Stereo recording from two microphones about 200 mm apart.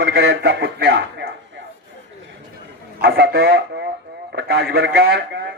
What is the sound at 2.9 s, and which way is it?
A man's voice, 50° right (ahead or behind).